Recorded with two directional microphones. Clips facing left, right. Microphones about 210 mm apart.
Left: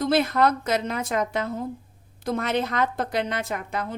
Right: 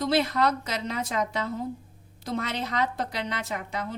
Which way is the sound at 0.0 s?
50° left (ahead or behind).